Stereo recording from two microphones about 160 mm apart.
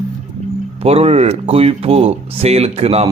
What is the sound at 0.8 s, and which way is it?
Speech, 40° right (ahead or behind).